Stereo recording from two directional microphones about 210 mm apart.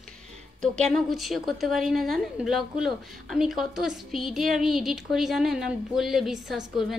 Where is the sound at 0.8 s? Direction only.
Centre (ahead or behind).